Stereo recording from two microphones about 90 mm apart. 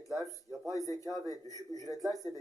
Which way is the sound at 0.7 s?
40° left (ahead or behind).